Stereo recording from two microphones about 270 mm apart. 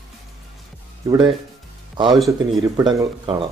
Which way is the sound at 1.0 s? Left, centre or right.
Centre.